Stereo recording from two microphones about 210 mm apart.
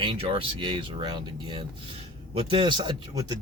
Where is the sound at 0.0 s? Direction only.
25° right (ahead or behind).